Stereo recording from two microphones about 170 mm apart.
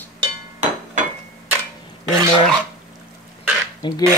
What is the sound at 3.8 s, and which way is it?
Speech, 25° left (ahead or behind).